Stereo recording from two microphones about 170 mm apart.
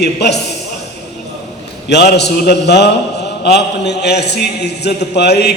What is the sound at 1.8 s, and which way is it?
A man's voice, 75° left (ahead or behind).